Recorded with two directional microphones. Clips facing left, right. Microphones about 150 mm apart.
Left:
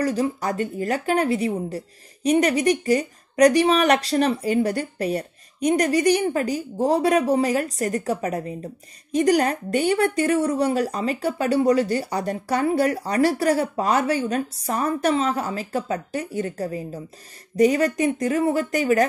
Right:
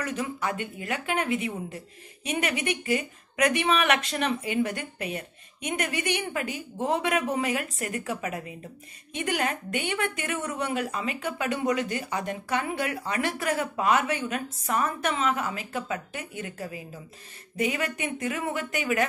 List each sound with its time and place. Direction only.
0.0 s a woman's voice: 35° left (ahead or behind)